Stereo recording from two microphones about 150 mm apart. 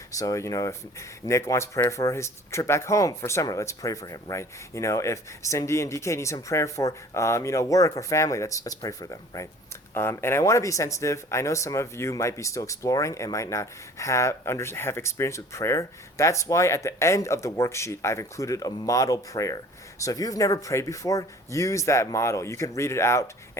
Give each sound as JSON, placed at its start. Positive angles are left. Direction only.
{"t": 0.2, "sound": "speech", "side_deg": 20}